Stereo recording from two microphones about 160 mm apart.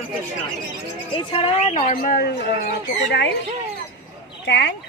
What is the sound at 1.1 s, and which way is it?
Speech, 35° left (ahead or behind).